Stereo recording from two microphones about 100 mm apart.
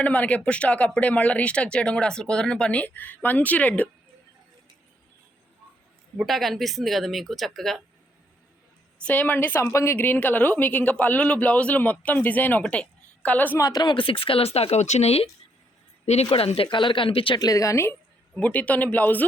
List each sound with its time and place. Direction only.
0.0 s a woman's voice: 15° left (ahead or behind)
6.1 s speech: centre (ahead or behind)
9.0 s a woman's voice: 15° left (ahead or behind)
13.6 s a woman's voice: 40° left (ahead or behind)
13.9 s speech: 60° left (ahead or behind); by 15.3 s 85° left
16.3 s speech: 70° left (ahead or behind)
17.4 s a woman's voice: 35° left (ahead or behind)
18.3 s a woman's voice: 15° left (ahead or behind)